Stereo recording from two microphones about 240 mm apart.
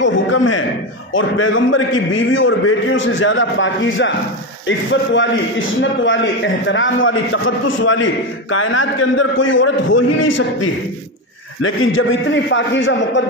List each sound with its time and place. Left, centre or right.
0.0 s a sound: left
1.1 s a man's voice: left
11.6 s a man's voice: left